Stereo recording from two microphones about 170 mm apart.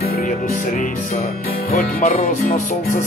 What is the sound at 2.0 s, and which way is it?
Speech, 45° left (ahead or behind).